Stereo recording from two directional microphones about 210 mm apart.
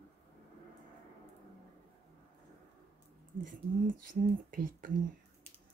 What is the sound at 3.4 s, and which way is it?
Speech, 40° right (ahead or behind).